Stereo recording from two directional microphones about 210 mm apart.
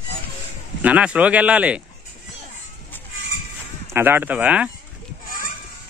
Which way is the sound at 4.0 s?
10° right (ahead or behind).